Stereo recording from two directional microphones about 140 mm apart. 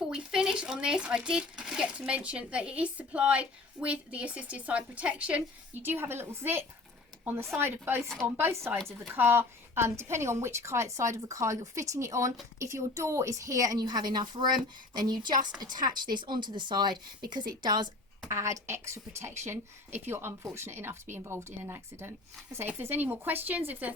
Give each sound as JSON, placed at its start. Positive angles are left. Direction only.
{"t": 0.1, "sound": "speech", "side_deg": -5}
{"t": 8.0, "sound": "speech", "side_deg": 5}
{"t": 8.4, "sound": "a woman's voice", "side_deg": -15}